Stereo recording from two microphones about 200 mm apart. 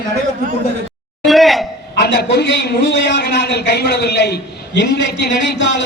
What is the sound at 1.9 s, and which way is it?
A man's voice, 55° left (ahead or behind).